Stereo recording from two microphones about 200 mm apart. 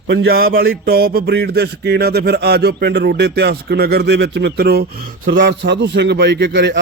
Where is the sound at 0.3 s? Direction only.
50° right (ahead or behind).